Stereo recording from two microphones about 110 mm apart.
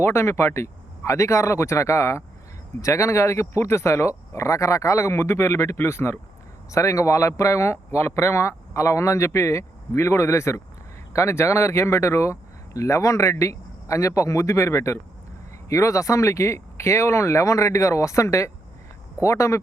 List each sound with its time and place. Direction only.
0.0 s speech: 25° left (ahead or behind)